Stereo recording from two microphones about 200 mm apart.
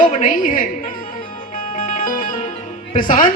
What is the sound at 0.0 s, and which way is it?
Speech, 40° left (ahead or behind).